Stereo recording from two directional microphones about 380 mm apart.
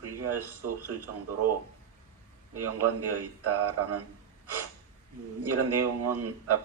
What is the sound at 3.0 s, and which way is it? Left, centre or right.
A man's voice, right.